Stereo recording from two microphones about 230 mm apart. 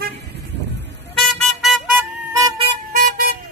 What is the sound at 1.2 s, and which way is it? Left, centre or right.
Vehicle, centre.